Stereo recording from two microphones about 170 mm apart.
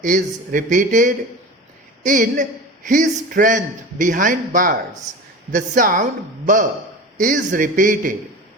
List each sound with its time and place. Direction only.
0.0 s a man's voice: 50° right (ahead or behind)